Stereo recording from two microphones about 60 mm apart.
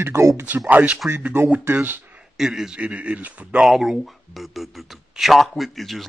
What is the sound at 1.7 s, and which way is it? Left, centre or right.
Speech, right.